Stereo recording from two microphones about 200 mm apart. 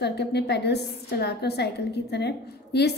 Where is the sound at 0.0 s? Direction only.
55° left (ahead or behind).